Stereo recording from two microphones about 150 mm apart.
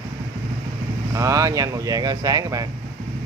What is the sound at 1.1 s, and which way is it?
Speech, 20° right (ahead or behind).